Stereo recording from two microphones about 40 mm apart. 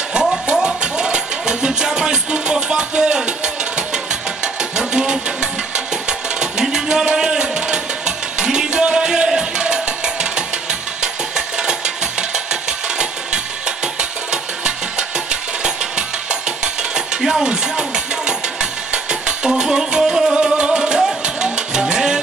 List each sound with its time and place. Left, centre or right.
0.1 s music: centre
4.7 s a sound: centre
6.0 s music: centre
16.3 s a sound: centre
17.2 s music: centre
20.5 s music: centre